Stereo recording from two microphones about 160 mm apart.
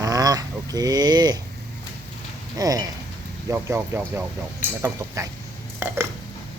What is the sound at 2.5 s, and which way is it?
Speech, 20° right (ahead or behind).